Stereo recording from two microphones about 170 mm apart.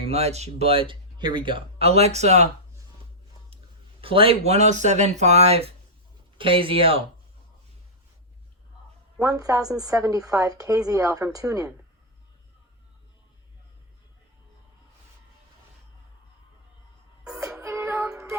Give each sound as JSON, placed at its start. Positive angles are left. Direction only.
{"t": 0.0, "sound": "speech", "side_deg": -40}
{"t": 4.0, "sound": "speech", "side_deg": -30}
{"t": 9.2, "sound": "a woman's voice", "side_deg": -20}
{"t": 17.6, "sound": "music", "side_deg": -15}